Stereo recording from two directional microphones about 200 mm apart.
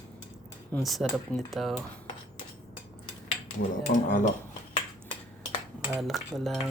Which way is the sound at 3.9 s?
40° left (ahead or behind).